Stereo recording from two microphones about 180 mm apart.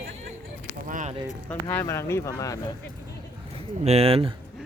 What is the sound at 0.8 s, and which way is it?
Speech, 45° right (ahead or behind).